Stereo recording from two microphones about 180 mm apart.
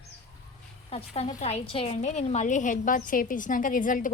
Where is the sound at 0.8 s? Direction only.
35° left (ahead or behind).